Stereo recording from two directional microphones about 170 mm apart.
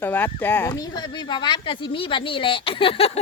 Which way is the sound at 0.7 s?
25° left (ahead or behind).